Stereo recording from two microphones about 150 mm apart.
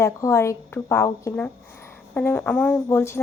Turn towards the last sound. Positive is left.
turn(degrees=20)  # may be behind; listen again after turning